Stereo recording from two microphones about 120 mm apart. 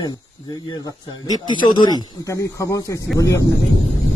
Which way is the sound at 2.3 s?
25° left (ahead or behind).